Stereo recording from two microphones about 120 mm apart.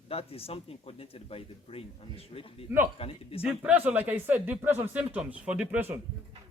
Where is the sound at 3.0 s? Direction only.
55° left (ahead or behind).